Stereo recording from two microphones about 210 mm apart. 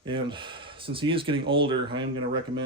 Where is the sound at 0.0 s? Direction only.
20° right (ahead or behind).